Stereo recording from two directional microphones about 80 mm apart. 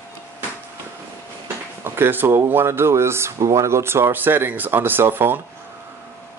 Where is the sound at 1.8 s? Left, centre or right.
Right.